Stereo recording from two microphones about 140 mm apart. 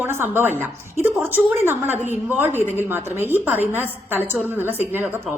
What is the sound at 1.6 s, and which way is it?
A woman's voice, 15° right (ahead or behind).